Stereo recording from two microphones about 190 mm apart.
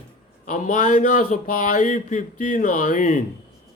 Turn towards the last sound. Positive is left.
turn(degrees=45)  # may be behind; listen again after turning